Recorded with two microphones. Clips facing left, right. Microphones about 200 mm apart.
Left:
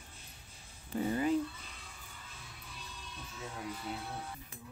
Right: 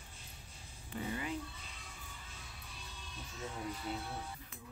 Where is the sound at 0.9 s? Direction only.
40° left (ahead or behind).